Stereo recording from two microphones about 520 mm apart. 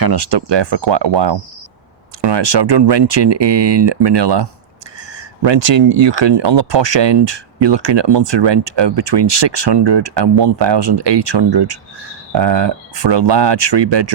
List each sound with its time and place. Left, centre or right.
0.0 s speech: right